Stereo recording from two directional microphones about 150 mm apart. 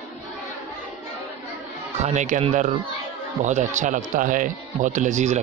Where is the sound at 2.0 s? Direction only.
50° right (ahead or behind).